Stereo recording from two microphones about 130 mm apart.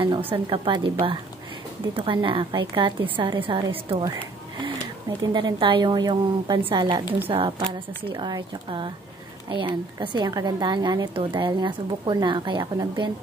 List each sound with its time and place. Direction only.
0.0 s a woman's voice: 40° right (ahead or behind)
5.2 s a woman's voice: 35° right (ahead or behind)
7.5 s a woman's voice: 30° right (ahead or behind)